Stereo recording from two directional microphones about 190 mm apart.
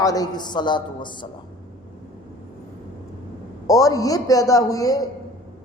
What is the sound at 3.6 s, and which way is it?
A man's voice, 15° left (ahead or behind).